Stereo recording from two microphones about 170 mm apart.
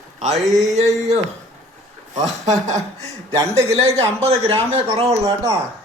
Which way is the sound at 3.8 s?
35° right (ahead or behind).